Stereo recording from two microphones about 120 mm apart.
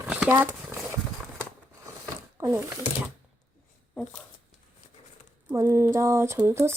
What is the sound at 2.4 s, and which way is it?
Speech, 25° right (ahead or behind).